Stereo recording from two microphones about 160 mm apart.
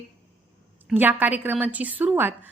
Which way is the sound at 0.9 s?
10° right (ahead or behind).